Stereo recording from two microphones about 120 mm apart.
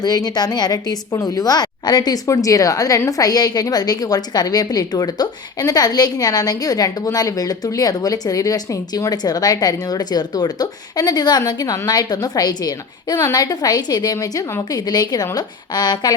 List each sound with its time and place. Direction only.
0.0 s a woman's voice: 35° left (ahead or behind)